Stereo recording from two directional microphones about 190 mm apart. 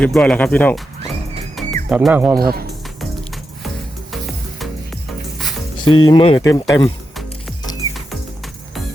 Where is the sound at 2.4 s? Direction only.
55° right (ahead or behind).